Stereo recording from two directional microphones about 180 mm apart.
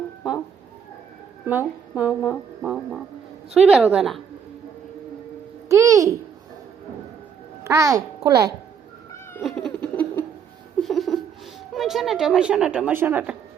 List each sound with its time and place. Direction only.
1.5 s speech: 10° right (ahead or behind)
5.6 s a child's voice: 15° right (ahead or behind)
7.6 s a child's voice: 15° right (ahead or behind)
9.4 s giggle: centre (ahead or behind)
10.8 s a sound: centre (ahead or behind)
11.7 s speech: centre (ahead or behind)